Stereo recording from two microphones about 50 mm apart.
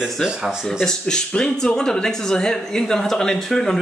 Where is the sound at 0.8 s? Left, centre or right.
Centre.